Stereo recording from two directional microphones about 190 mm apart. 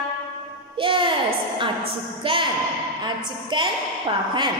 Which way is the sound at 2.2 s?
25° right (ahead or behind).